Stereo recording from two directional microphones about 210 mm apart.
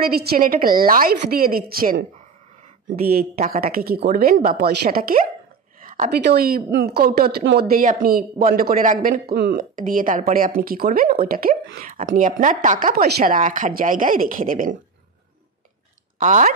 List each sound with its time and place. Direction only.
0.0 s a woman's voice: 50° right (ahead or behind)
16.2 s a woman's voice: 40° right (ahead or behind)